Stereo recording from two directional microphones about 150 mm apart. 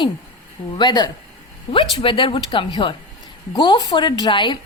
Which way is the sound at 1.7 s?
40° left (ahead or behind).